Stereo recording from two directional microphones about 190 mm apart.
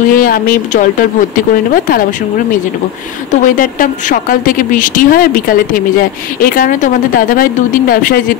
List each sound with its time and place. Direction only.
0.1 s speech: 50° left (ahead or behind)
3.3 s speech: 45° left (ahead or behind)